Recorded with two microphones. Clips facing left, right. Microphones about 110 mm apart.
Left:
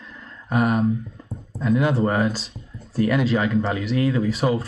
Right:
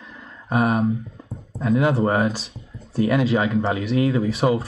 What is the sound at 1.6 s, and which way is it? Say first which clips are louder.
A man's voice: right 1 dB; 25° right (ahead or behind).